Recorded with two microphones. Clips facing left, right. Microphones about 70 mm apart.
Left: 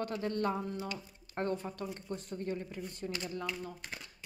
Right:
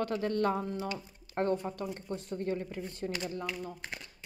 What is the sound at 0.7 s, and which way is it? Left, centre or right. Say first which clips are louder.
Speech: right 3 dB; right.